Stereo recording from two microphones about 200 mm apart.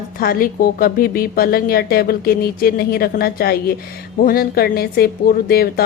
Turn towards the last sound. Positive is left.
turn(degrees=50)  # may be behind; listen again after turning